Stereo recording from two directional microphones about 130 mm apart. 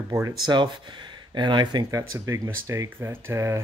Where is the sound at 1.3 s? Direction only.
35° right (ahead or behind).